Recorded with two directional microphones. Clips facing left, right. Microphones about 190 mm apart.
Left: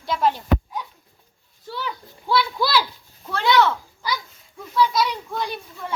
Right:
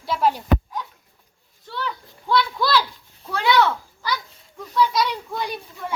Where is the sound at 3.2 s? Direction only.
10° right (ahead or behind).